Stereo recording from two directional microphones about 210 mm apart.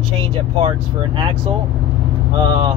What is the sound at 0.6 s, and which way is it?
Speech, 25° right (ahead or behind).